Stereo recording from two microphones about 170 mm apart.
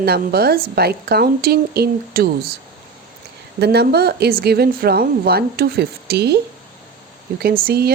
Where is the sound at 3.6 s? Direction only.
75° right (ahead or behind).